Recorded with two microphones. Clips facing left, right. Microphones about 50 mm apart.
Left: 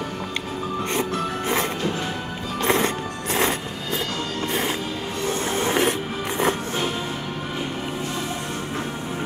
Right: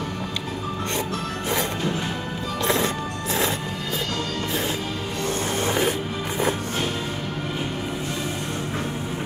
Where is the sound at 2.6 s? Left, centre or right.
Left.